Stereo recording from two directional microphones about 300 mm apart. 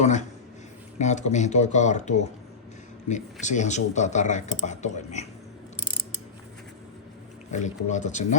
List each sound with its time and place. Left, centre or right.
0.0 s speech: left
3.4 s speech: left
7.9 s speech: left